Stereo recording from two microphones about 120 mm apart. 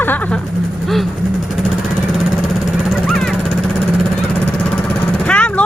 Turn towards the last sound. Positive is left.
turn(degrees=10)  # may be behind; listen again after turning